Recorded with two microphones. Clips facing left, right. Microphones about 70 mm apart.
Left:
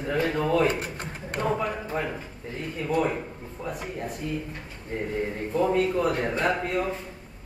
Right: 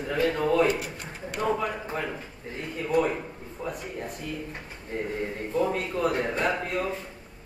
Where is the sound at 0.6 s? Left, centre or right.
Left.